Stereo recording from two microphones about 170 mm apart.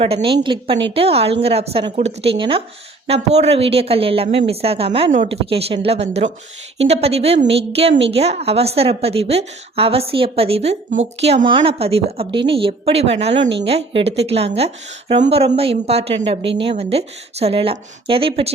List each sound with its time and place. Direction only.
0.0 s a woman's voice: 35° right (ahead or behind)